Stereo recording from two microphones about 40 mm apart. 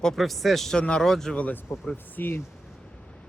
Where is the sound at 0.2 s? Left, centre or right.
Centre.